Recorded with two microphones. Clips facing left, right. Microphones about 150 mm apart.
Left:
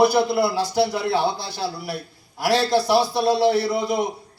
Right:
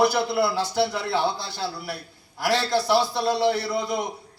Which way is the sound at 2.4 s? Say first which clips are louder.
Left 3 dB; 20° left (ahead or behind).